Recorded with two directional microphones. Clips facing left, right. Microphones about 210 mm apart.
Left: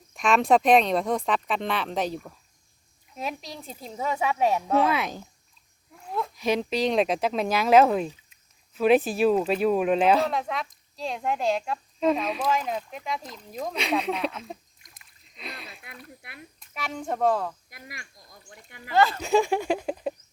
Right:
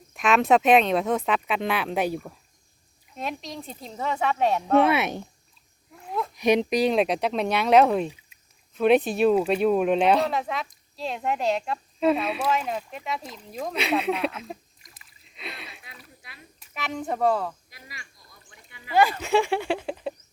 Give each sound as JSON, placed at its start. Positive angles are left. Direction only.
{"t": 0.1, "sound": "speech", "side_deg": 0}
{"t": 3.2, "sound": "speech", "side_deg": 5}
{"t": 4.8, "sound": "speech", "side_deg": -25}
{"t": 6.0, "sound": "a sound", "side_deg": 0}
{"t": 6.3, "sound": "speech", "side_deg": -15}
{"t": 6.9, "sound": "speech", "side_deg": 0}
{"t": 17.7, "sound": "a sound", "side_deg": 55}
{"t": 18.9, "sound": "speech", "side_deg": -15}
{"t": 19.2, "sound": "a sound", "side_deg": 15}